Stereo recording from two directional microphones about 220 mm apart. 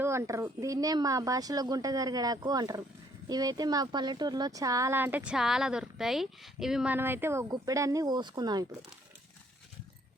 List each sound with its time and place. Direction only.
0.0 s speech: 10° right (ahead or behind)